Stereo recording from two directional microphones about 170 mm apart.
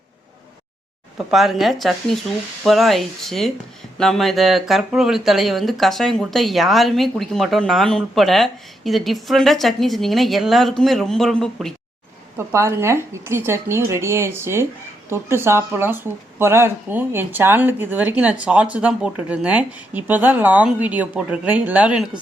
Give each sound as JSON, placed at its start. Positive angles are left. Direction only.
{"t": 1.3, "sound": "speech", "side_deg": 0}
{"t": 12.5, "sound": "speech", "side_deg": -15}